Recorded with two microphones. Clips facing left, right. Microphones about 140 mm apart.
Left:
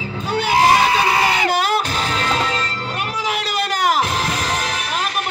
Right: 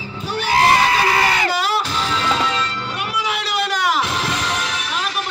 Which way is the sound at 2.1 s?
50° left (ahead or behind).